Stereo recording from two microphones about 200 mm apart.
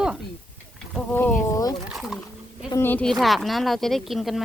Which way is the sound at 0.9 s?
5° left (ahead or behind).